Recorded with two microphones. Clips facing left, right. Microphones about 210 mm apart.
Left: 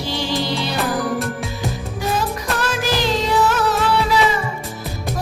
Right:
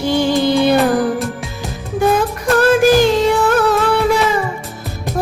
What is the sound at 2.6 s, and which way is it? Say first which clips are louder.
Music: right 13 dB; 50° right (ahead or behind).